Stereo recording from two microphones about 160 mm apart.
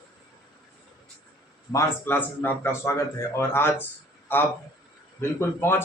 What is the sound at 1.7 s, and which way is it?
A man's voice, 15° left (ahead or behind).